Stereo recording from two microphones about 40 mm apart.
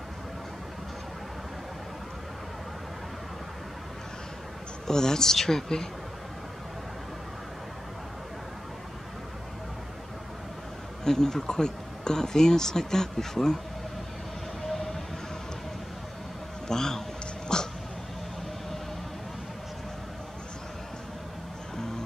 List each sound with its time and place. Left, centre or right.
4.8 s speech: centre
11.1 s speech: centre
14.7 s music: centre
16.6 s speech: centre
17.5 s a sound: centre